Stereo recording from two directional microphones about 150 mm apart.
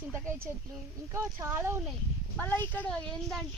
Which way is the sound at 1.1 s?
15° right (ahead or behind).